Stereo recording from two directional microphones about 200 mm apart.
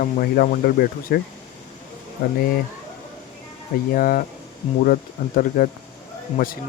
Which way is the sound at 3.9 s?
45° left (ahead or behind).